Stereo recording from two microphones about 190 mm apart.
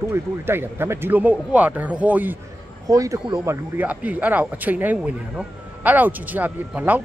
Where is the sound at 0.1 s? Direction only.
10° right (ahead or behind).